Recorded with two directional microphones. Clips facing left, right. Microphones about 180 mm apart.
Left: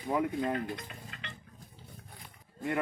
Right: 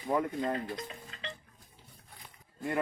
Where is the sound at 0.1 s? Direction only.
5° left (ahead or behind).